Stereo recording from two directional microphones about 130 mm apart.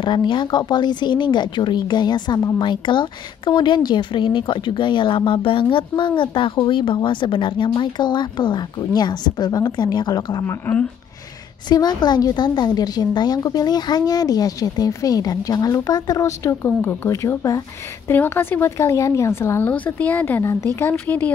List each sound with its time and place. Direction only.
0.0 s a woman's voice: 35° left (ahead or behind)
10.4 s speech: 10° left (ahead or behind)
11.7 s a woman's voice: 30° left (ahead or behind); by 21.3 s 15° left (ahead or behind)